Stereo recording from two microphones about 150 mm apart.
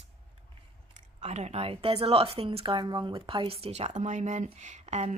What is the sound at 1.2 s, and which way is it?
A woman's voice, 45° right (ahead or behind).